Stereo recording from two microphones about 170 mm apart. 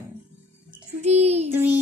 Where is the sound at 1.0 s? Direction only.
40° right (ahead or behind).